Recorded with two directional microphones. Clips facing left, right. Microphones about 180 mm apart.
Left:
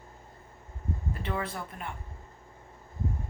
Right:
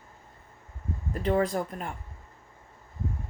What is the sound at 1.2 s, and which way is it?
Speech, 40° right (ahead or behind).